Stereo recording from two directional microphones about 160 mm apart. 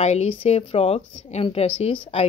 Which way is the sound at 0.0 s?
45° left (ahead or behind).